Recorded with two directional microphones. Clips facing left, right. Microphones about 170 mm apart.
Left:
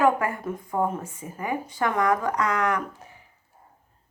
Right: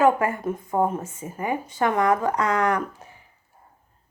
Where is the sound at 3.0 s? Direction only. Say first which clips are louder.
Right 1 dB; 25° right (ahead or behind).